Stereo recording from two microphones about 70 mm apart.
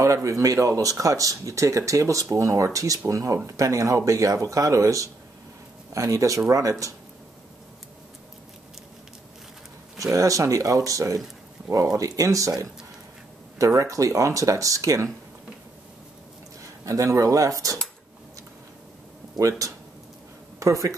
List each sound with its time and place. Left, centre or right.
0.0 s speech: right
10.1 s speech: right
13.7 s speech: right
16.6 s speech: right
20.5 s speech: right